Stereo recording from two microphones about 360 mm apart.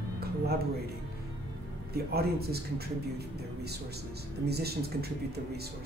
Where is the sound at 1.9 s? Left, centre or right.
Right.